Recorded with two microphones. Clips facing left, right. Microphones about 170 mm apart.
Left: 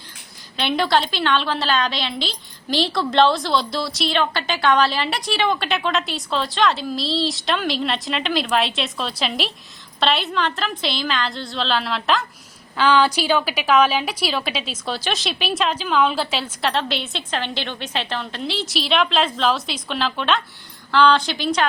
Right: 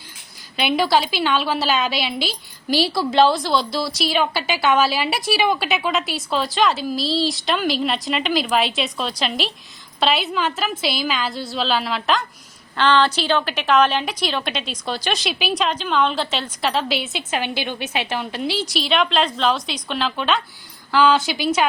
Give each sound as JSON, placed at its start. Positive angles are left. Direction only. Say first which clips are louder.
{"t": 0.5, "sound": "a woman's voice", "louder": "right 1 dB", "side_deg": -5}